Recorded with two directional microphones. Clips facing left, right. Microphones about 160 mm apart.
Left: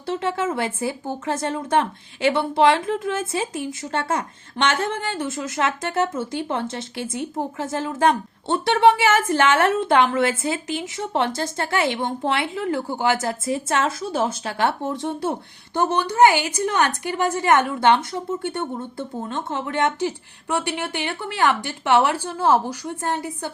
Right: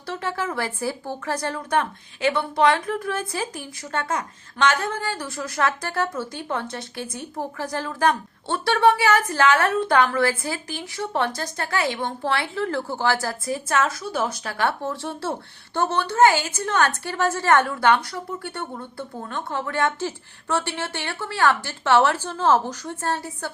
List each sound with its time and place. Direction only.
0.0 s speech: 25° left (ahead or behind)